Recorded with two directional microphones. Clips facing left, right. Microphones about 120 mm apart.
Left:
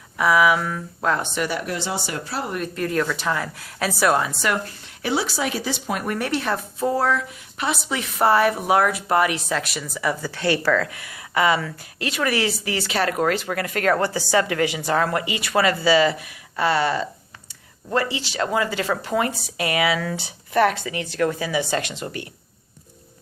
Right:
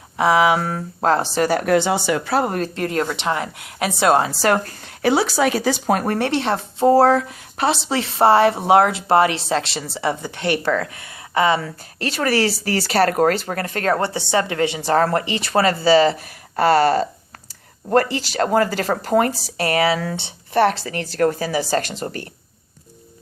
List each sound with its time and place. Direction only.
0.2 s a woman's voice: 25° right (ahead or behind)
0.6 s speech: 40° right (ahead or behind)
1.6 s speech: 60° right (ahead or behind); by 2.2 s 90° right
2.3 s speech: 50° right (ahead or behind)
2.6 s a woman's voice: 25° right (ahead or behind); by 6.1 s 40° right (ahead or behind)
6.1 s a woman's voice: 30° right (ahead or behind)